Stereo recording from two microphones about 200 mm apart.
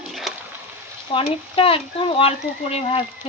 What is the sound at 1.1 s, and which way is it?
Speech, 25° left (ahead or behind).